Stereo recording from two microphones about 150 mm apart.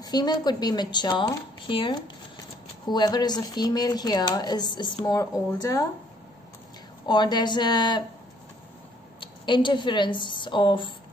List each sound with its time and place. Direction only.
0.0 s a woman's voice: 25° left (ahead or behind)
7.1 s a woman's voice: 30° left (ahead or behind)
9.2 s speech: 30° left (ahead or behind)